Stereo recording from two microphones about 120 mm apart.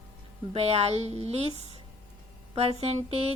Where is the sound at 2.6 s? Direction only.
60° right (ahead or behind).